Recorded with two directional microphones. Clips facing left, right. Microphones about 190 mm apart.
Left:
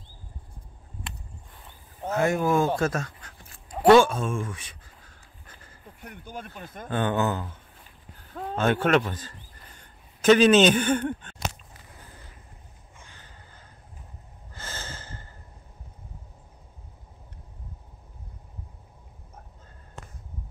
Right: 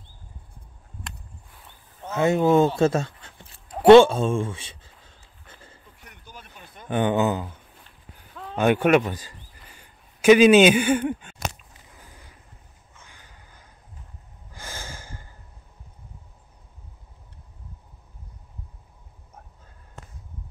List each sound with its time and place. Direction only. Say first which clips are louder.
2.1 s speech: right 5 dB; 25° right (ahead or behind)
3.8 s writing: right 5 dB; 25° right (ahead or behind)
6.0 s speech: left 8 dB; 50° left (ahead or behind)
6.9 s speech: right 4 dB; 15° right (ahead or behind)
8.5 s a man's voice: right 4 dB; 15° right (ahead or behind)
13.1 s crow: left 1 dB; 10° right (ahead or behind)
14.5 s a sound: right 1 dB; 15° right (ahead or behind)